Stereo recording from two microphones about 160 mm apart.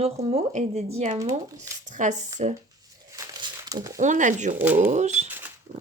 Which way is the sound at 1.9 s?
50° right (ahead or behind).